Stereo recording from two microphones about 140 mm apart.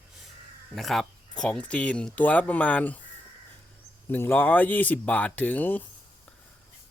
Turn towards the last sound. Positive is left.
turn(degrees=10)  # may be behind; listen again after turning